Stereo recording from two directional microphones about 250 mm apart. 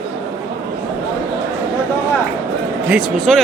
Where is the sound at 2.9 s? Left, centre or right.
Centre.